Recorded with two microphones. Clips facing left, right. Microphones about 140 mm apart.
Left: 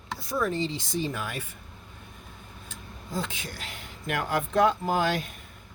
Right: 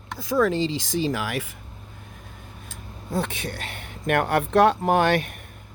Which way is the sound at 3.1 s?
65° right (ahead or behind).